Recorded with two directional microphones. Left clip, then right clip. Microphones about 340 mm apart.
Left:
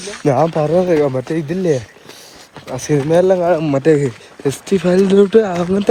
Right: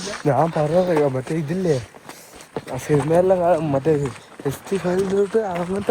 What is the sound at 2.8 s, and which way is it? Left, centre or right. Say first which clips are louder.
Speech: left 4 dB; left.